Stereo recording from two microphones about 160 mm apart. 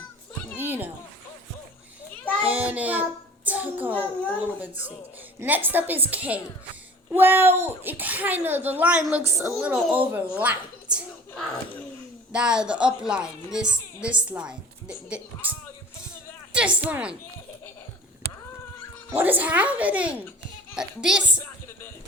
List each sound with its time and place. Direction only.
0.6 s a sound: 10° right (ahead or behind)
2.4 s child singing: 10° right (ahead or behind)
5.4 s a woman's voice: 10° right (ahead or behind)
19.1 s a woman's voice: 10° right (ahead or behind)